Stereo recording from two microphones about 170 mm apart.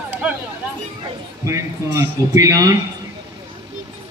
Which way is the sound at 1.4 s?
15° right (ahead or behind).